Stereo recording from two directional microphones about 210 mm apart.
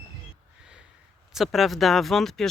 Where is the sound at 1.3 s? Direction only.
Centre (ahead or behind).